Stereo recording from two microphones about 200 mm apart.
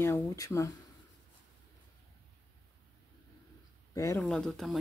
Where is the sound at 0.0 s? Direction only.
10° left (ahead or behind).